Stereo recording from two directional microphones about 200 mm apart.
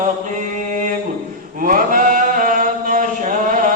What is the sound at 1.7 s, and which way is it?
Chant, 45° right (ahead or behind).